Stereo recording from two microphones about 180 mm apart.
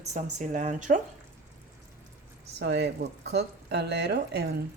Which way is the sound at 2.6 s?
70° right (ahead or behind).